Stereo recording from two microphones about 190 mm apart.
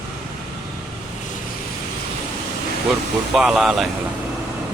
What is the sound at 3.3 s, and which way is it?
Speech, centre (ahead or behind).